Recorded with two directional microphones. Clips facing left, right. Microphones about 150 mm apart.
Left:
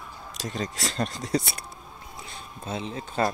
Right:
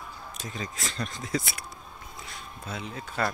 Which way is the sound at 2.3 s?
25° left (ahead or behind).